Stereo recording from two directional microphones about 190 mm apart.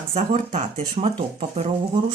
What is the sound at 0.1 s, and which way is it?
Speech, 40° right (ahead or behind).